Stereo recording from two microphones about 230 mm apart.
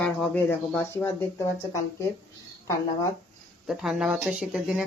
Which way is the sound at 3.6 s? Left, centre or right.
Centre.